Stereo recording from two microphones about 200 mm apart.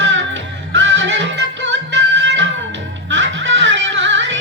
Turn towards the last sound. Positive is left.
turn(degrees=-65)  # may be behind; listen again after turning